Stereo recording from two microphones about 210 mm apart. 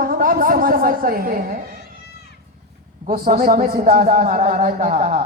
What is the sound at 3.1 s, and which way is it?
A man's voice, 45° right (ahead or behind).